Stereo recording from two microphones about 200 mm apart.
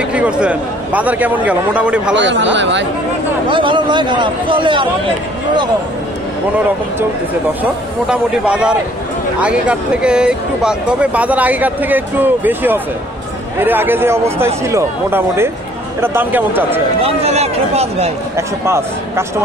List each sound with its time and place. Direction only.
0.1 s speech: 5° right (ahead or behind)
2.1 s speech: 65° right (ahead or behind)
3.4 s speech: 25° right (ahead or behind)
7.6 s speech: 5° right (ahead or behind)
17.0 s speech: 30° right (ahead or behind)
18.3 s speech: 15° right (ahead or behind)